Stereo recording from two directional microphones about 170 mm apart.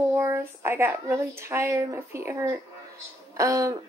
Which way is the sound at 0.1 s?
15° right (ahead or behind).